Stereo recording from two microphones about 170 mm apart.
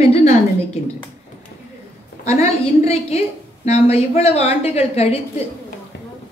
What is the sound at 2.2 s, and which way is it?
A woman's voice, 40° left (ahead or behind).